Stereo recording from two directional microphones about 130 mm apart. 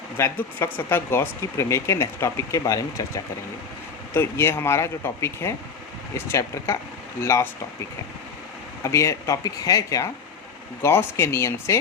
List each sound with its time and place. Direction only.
0.2 s speech: 20° left (ahead or behind)
4.1 s speech: 20° left (ahead or behind)
8.8 s speech: 25° left (ahead or behind)